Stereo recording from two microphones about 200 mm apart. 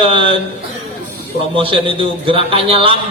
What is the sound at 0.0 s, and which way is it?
Speech, 25° right (ahead or behind).